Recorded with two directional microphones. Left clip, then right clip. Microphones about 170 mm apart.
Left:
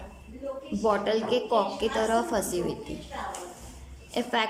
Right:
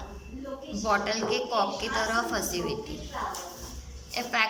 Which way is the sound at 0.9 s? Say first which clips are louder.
Left 2 dB; 40° left (ahead or behind).